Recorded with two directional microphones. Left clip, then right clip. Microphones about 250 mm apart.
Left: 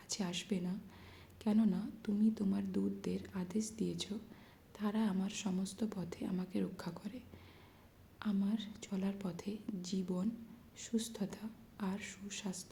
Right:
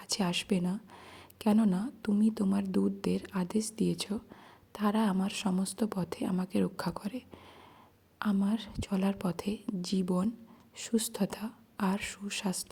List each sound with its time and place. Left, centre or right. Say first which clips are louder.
0.1 s speech: right 9 dB; right